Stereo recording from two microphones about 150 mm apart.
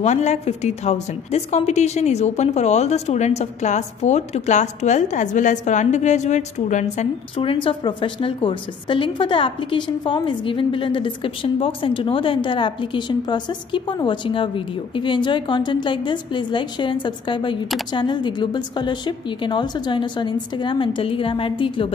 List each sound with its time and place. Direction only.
0.0 s a woman's voice: 50° left (ahead or behind)